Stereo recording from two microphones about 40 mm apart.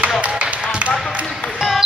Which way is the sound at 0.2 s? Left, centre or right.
Right.